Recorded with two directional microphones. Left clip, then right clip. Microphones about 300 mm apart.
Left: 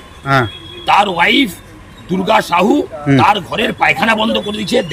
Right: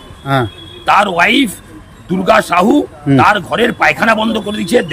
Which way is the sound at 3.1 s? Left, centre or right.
Centre.